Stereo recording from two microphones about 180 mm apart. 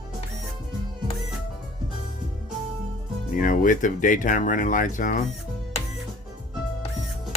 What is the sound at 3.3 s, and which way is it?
Speech, 45° left (ahead or behind).